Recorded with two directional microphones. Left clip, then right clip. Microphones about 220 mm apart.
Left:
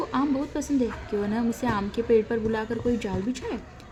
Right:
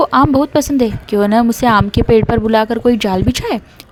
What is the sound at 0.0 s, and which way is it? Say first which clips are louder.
A woman's voice: right 16 dB; 45° right (ahead or behind).